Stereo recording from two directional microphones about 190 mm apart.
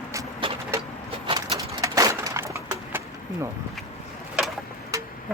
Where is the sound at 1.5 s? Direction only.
15° right (ahead or behind).